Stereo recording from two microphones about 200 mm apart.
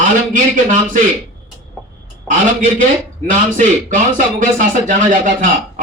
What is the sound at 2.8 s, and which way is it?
Speech, 40° right (ahead or behind).